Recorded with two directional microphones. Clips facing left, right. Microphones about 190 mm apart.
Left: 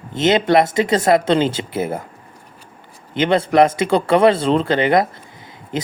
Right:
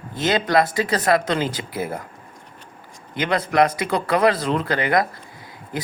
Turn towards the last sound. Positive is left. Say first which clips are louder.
# left 4 dB
turn(degrees=20)  # may be behind; listen again after turning